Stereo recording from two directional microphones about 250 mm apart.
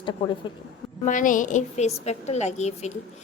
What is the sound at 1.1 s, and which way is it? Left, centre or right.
A woman's voice, left.